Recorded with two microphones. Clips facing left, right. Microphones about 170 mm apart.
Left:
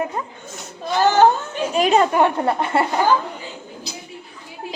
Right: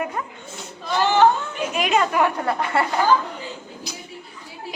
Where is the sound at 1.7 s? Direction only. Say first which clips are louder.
Left 5 dB; 35° left (ahead or behind).